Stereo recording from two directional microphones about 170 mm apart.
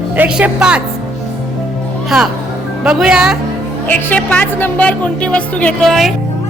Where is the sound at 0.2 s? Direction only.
5° right (ahead or behind).